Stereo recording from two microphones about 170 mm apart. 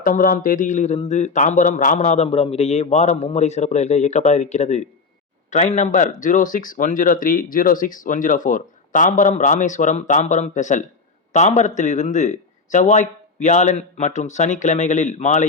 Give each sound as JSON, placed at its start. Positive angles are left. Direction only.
{"t": 0.0, "sound": "a man's voice", "side_deg": 55}